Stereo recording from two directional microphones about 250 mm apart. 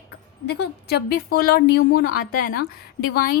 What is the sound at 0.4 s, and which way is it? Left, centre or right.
A woman's voice, left.